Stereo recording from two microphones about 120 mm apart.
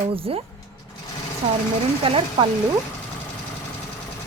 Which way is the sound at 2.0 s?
50° right (ahead or behind).